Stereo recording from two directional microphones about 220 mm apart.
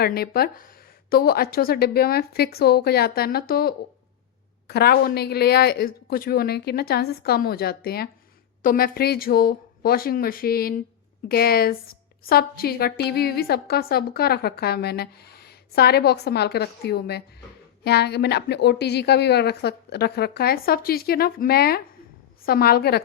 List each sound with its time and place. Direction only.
0.0 s a woman's voice: 45° left (ahead or behind)